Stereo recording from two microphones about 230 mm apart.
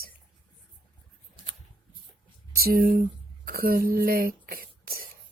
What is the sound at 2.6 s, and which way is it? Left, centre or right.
Speech, right.